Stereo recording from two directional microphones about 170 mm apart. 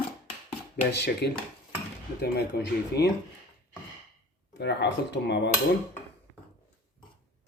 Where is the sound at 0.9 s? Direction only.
80° left.